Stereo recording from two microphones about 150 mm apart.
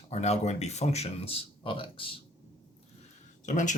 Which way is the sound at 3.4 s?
55° left (ahead or behind).